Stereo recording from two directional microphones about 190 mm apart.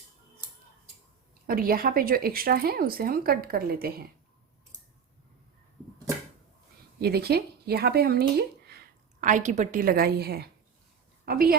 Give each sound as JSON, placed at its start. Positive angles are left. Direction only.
{"t": 1.5, "sound": "speech", "side_deg": -50}
{"t": 7.0, "sound": "speech", "side_deg": -55}
{"t": 9.2, "sound": "speech", "side_deg": -40}